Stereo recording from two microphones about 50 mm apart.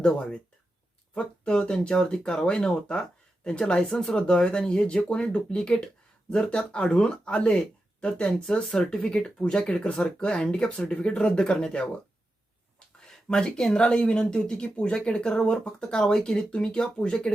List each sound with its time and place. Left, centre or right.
0.0 s speech: left
13.1 s speech: centre